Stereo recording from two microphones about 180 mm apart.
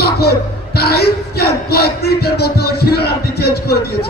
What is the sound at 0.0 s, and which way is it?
Speech, 60° left (ahead or behind).